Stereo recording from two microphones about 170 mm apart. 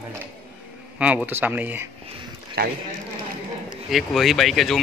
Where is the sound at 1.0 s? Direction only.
5° right (ahead or behind).